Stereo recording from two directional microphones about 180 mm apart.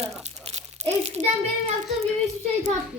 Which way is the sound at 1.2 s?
45° right (ahead or behind).